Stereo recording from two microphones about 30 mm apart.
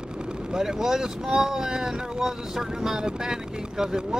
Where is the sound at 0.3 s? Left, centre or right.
Right.